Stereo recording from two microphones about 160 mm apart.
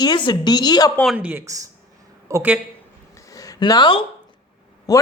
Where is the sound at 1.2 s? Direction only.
10° right (ahead or behind).